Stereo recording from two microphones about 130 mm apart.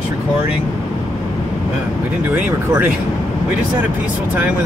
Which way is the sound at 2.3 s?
15° right (ahead or behind).